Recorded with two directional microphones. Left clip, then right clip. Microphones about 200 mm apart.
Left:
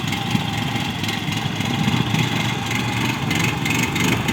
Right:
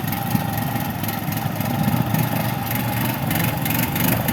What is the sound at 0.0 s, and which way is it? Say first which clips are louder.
Vehicle: left 2 dB; 15° right (ahead or behind).